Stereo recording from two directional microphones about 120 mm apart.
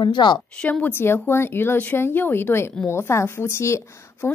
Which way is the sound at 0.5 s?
10° left (ahead or behind).